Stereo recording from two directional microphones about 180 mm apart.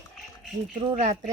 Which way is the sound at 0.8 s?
35° right (ahead or behind).